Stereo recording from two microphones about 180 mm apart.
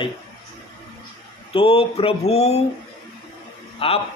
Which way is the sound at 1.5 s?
30° left (ahead or behind).